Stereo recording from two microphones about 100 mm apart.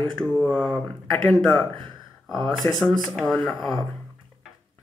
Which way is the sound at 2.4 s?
Centre (ahead or behind).